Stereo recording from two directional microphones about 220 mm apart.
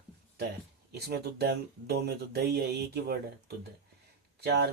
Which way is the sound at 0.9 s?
45° right (ahead or behind).